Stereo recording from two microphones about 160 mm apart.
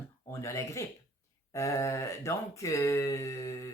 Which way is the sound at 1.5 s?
20° left (ahead or behind).